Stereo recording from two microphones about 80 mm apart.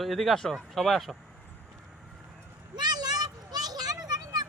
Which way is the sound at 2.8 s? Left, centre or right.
Right.